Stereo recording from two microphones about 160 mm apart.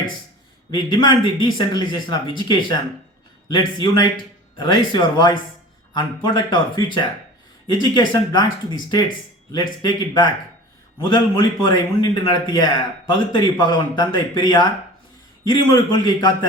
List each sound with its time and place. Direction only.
0.7 s a man's voice: 30° left (ahead or behind)